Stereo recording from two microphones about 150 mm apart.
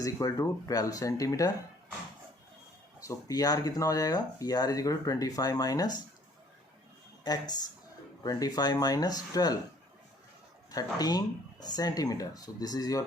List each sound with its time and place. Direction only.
0.0 s speech: 20° left (ahead or behind)
3.0 s speech: 20° left (ahead or behind)
7.3 s speech: 25° left (ahead or behind)
10.7 s speech: 25° left (ahead or behind)